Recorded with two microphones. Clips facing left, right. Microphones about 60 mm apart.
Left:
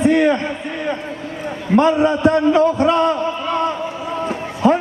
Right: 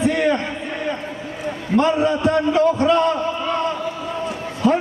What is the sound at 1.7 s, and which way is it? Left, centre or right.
A man's voice, left.